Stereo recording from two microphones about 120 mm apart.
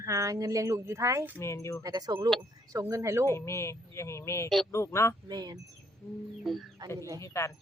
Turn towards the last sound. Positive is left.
turn(degrees=25)  # may be behind; listen again after turning